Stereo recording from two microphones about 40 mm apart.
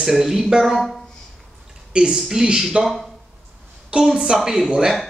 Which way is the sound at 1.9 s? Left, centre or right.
Right.